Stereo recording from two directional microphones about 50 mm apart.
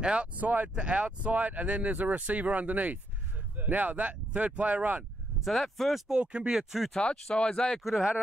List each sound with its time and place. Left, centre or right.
0.0 s speech: right
0.4 s speech: right
0.7 s speech: right
5.4 s speech: centre
6.0 s speech: centre
6.9 s speech: centre
7.8 s speech: centre